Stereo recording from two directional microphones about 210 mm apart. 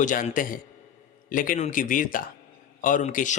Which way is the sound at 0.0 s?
40° left (ahead or behind).